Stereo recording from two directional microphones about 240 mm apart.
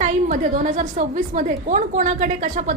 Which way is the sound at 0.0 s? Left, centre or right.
Right.